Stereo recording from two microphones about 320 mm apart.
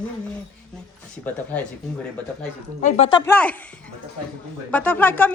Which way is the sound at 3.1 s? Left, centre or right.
Centre.